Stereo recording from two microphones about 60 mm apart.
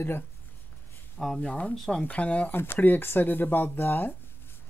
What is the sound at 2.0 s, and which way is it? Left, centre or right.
Speech, left.